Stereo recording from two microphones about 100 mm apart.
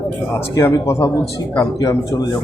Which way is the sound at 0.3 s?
30° left (ahead or behind).